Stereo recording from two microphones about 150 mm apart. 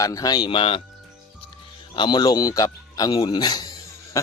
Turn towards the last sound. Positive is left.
turn(degrees=25)  # may be behind; listen again after turning